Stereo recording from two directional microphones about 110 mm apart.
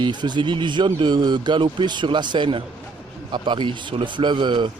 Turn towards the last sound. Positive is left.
turn(degrees=-45)  # may be behind; listen again after turning